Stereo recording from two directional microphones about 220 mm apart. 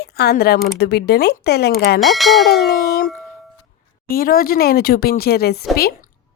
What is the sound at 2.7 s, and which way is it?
Dog, 45° left (ahead or behind).